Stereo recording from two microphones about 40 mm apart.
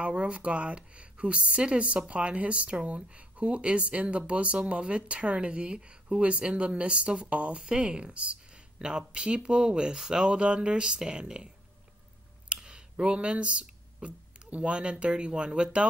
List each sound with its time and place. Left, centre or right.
0.0 s speech: right
12.6 s speech: right